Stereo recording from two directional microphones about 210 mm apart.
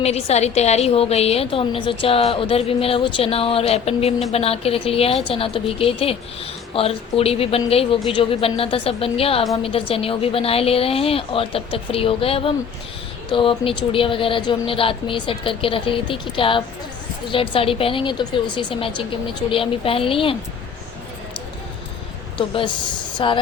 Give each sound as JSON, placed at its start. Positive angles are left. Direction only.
{"t": 0.0, "sound": "a woman's voice", "side_deg": 30}
{"t": 22.4, "sound": "a woman's voice", "side_deg": 25}